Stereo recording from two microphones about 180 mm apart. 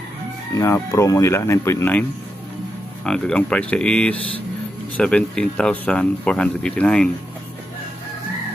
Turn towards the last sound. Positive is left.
turn(degrees=5)  # may be behind; listen again after turning